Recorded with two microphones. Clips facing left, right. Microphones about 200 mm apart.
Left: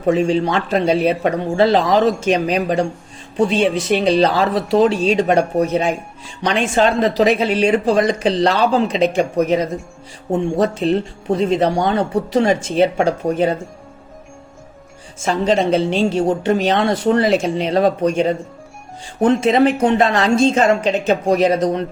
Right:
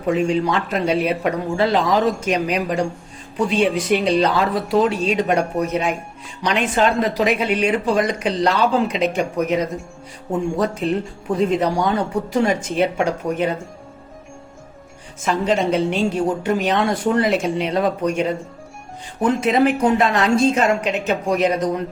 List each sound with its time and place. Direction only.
0.1 s a woman's voice: 30° left (ahead or behind)
15.2 s a woman's voice: 30° left (ahead or behind)
19.4 s a woman's voice: 30° left (ahead or behind)